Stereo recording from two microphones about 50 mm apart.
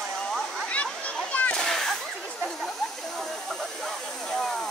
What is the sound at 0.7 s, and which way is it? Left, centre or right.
Splash, left.